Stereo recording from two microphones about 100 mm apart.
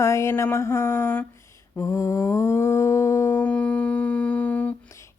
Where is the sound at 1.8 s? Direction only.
30° left (ahead or behind).